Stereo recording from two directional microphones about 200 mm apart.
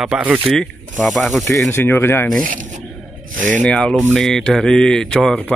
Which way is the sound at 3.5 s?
5° left (ahead or behind).